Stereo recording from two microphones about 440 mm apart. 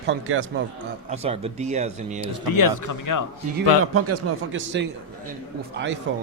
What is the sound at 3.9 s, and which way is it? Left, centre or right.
A man's voice, right.